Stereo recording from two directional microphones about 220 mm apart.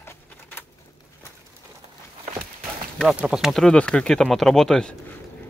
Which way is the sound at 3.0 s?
Centre (ahead or behind).